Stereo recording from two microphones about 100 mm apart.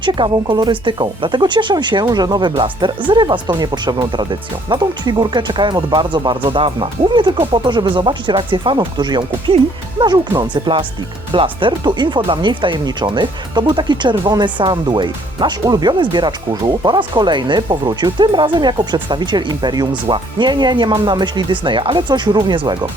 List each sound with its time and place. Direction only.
0.0 s speech: 50° right (ahead or behind)